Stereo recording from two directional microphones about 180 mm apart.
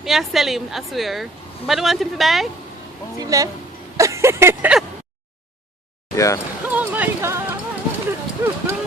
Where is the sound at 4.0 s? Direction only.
15° right (ahead or behind).